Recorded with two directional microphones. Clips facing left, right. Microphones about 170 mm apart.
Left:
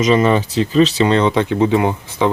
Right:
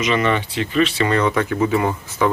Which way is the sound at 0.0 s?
35° left (ahead or behind).